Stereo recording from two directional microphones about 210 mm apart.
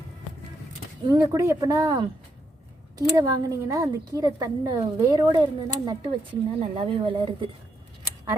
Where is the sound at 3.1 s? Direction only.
15° right (ahead or behind).